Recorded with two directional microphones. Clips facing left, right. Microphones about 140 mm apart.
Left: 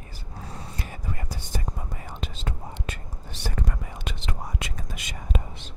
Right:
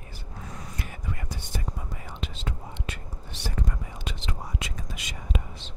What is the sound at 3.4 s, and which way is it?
Whispering, 60° left (ahead or behind).